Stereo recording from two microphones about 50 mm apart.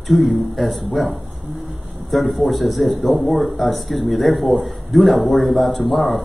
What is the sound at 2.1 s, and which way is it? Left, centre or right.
Speech, centre.